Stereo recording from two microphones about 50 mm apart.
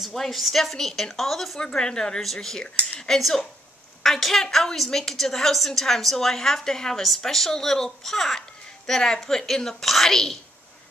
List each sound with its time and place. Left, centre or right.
0.0 s a woman's voice: centre
1.6 s a child's voice: centre